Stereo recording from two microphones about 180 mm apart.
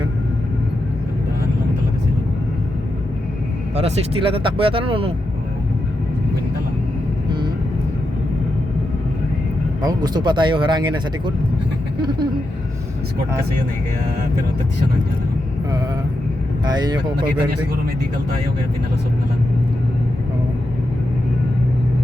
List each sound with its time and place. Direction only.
3.8 s speech: 30° right (ahead or behind)
9.8 s speech: 25° right (ahead or behind)
16.6 s speech: 25° right (ahead or behind)